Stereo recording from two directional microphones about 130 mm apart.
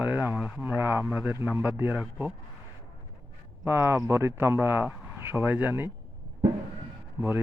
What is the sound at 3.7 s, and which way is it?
Speech, 20° right (ahead or behind).